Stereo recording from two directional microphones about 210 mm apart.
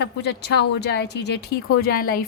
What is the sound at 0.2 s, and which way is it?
A woman's voice, 55° left (ahead or behind).